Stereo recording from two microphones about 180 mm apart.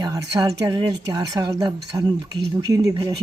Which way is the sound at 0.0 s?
20° right (ahead or behind).